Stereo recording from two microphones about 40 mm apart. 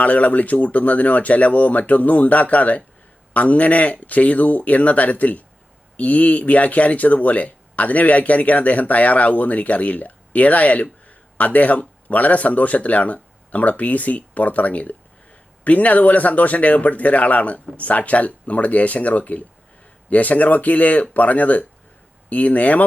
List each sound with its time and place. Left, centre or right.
0.0 s speech: left